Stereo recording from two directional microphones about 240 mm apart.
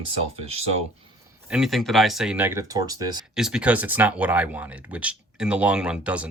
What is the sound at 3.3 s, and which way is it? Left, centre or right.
Speech, centre.